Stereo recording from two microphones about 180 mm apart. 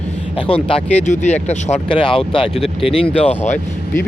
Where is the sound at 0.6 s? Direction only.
35° left (ahead or behind).